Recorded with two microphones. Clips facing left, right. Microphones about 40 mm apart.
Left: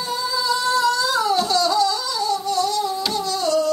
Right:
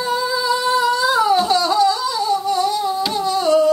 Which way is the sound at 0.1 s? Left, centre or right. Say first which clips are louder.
Right 3 dB; right.